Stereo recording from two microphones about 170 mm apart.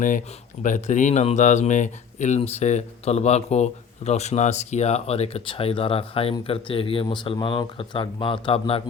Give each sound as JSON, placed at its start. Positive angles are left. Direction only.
{"t": 0.6, "sound": "speech", "side_deg": 45}